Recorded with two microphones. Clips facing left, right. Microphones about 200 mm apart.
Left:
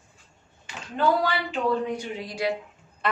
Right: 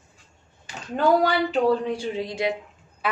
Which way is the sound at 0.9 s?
40° right (ahead or behind).